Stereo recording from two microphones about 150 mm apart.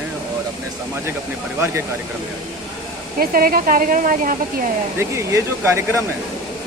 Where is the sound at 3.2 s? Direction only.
75° right (ahead or behind).